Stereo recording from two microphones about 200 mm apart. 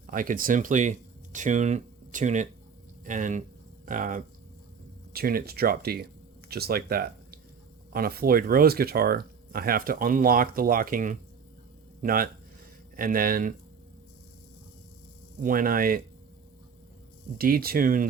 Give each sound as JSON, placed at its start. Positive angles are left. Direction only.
{"t": 0.1, "sound": "speech", "side_deg": -45}
{"t": 15.4, "sound": "speech", "side_deg": -45}
{"t": 17.3, "sound": "speech", "side_deg": -45}